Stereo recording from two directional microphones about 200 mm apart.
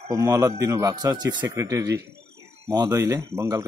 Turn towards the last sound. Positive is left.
turn(degrees=-15)  # may be behind; listen again after turning